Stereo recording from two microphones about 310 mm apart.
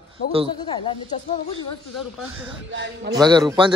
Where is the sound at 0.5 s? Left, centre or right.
Centre.